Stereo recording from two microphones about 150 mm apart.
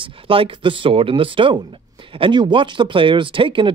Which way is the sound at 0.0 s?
35° right (ahead or behind).